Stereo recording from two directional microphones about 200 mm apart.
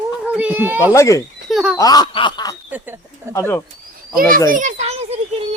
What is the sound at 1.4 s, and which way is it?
Speech, 5° right (ahead or behind).